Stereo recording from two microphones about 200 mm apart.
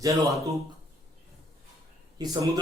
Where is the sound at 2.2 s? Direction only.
20° right (ahead or behind).